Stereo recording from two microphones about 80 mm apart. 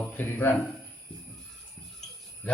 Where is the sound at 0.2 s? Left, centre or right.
Left.